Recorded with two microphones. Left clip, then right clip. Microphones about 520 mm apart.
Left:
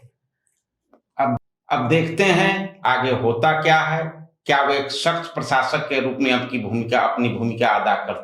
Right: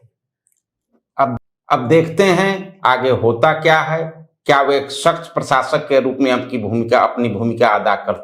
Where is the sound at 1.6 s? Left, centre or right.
Right.